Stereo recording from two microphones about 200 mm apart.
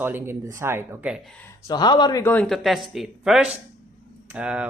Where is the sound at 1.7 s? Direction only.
20° left (ahead or behind).